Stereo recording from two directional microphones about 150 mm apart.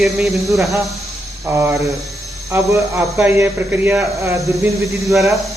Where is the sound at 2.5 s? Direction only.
15° right (ahead or behind).